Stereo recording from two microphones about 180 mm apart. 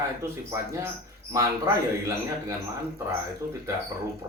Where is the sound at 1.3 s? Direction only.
15° right (ahead or behind).